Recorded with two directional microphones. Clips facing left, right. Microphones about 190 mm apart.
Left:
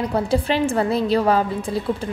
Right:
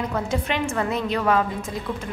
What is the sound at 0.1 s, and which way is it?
A woman's voice, 35° left (ahead or behind).